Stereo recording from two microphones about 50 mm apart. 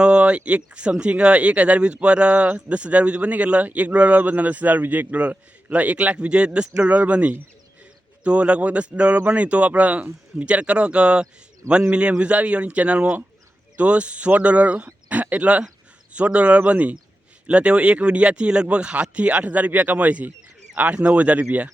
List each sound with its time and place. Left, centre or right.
0.0 s speech: right